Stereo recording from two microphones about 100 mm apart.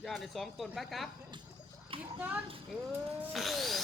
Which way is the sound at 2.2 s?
15° right (ahead or behind).